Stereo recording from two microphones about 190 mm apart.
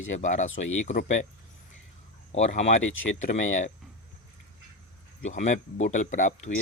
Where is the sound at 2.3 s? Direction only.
35° left (ahead or behind).